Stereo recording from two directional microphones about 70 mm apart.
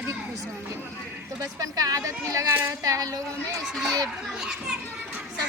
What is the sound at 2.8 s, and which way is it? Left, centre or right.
Speech, right.